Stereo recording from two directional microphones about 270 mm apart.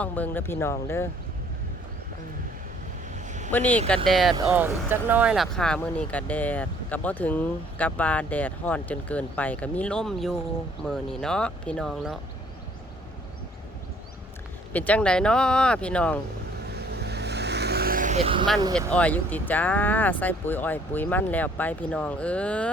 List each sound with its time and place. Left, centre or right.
0.0 s speech: centre
3.2 s vehicle: right
3.5 s speech: centre
14.7 s speech: centre
16.7 s vehicle: right
18.9 s speech: centre